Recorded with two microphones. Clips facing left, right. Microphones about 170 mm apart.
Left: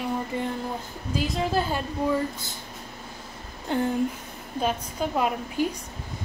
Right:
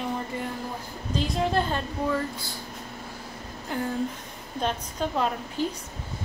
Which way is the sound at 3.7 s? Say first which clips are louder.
Left 5 dB; 25° left (ahead or behind).